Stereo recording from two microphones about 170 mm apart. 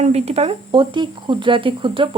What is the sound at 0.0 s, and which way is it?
Speech, 40° right (ahead or behind).